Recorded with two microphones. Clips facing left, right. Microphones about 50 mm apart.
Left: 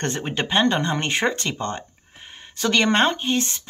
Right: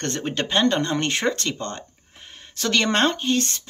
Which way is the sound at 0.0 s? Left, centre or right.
Centre.